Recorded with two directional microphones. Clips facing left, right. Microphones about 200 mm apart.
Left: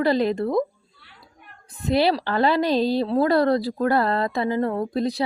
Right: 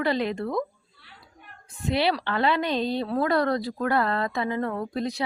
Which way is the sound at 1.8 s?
40° left (ahead or behind).